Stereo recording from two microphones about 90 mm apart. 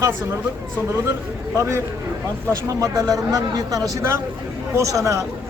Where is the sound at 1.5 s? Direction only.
35° right (ahead or behind).